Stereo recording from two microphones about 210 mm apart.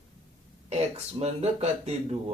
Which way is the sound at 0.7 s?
30° right (ahead or behind).